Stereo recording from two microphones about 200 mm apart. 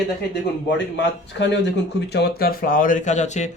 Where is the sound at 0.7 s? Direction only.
60° left (ahead or behind).